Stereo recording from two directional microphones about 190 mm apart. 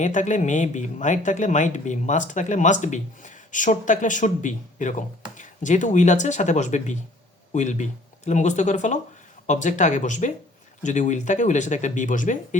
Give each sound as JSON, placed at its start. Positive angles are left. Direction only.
{"t": 0.0, "sound": "speech", "side_deg": 40}